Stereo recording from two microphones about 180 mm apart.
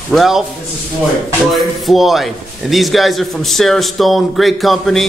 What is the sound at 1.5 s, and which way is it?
A man's voice, centre (ahead or behind).